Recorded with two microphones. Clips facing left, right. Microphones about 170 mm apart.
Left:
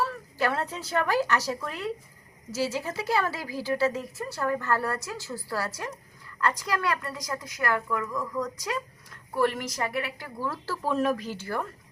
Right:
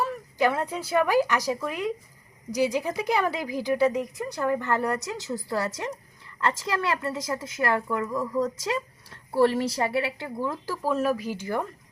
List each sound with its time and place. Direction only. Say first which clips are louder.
0.0 s a woman's voice: right 3 dB; 15° right (ahead or behind)
10.8 s speech: right 1 dB; 5° right (ahead or behind)